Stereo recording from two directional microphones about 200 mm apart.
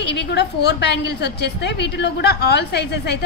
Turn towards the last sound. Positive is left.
turn(degrees=55)  # may be behind; listen again after turning